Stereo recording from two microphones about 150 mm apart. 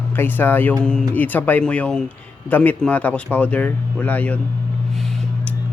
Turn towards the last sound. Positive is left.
turn(degrees=10)  # may be behind; listen again after turning